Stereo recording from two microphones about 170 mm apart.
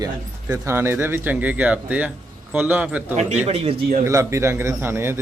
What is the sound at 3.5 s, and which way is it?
Speech, 40° right (ahead or behind).